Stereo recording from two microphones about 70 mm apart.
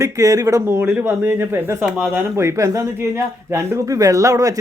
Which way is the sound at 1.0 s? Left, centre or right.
Right.